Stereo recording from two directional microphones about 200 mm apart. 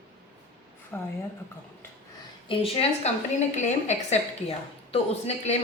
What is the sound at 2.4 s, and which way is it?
A woman's voice, 25° left (ahead or behind).